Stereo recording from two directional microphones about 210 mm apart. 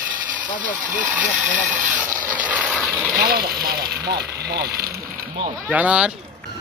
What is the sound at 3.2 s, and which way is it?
Speech, 45° right (ahead or behind).